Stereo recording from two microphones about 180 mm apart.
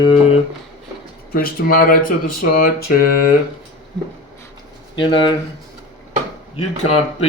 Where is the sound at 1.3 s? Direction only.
55° left (ahead or behind).